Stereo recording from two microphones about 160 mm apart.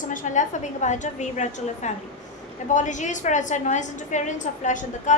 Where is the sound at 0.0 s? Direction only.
55° left (ahead or behind).